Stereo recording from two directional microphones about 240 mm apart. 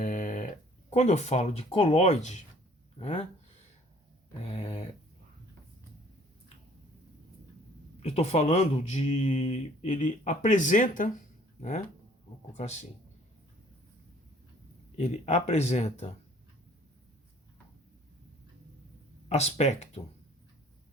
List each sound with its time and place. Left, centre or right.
0.0 s a sound: left
3.0 s speech: left
4.4 s speech: left
8.0 s speech: left
14.9 s speech: left
19.3 s speech: left